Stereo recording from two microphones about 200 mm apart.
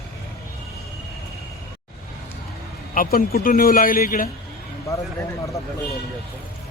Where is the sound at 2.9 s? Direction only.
45° left (ahead or behind).